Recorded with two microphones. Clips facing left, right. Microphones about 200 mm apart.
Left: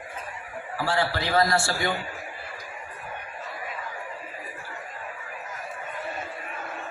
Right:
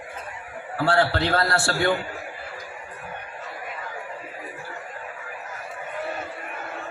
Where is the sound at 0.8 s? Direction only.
60° right (ahead or behind).